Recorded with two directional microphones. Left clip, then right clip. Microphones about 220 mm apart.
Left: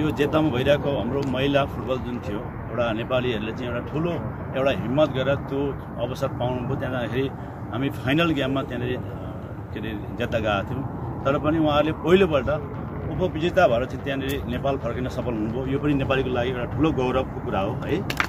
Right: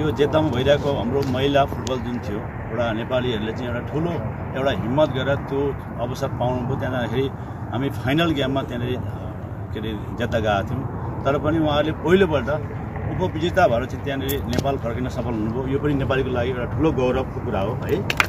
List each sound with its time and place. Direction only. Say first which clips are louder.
0.0 s speech: right 2 dB; 15° left (ahead or behind)
2.8 s speech: right 1 dB; 15° left (ahead or behind)
10.3 s speech: right 3 dB; 10° left (ahead or behind)